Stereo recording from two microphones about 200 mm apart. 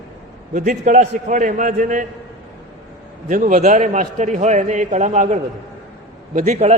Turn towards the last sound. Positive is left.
turn(degrees=-35)  # may be behind; listen again after turning